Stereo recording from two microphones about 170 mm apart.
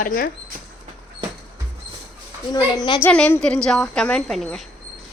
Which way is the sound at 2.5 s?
25° left (ahead or behind).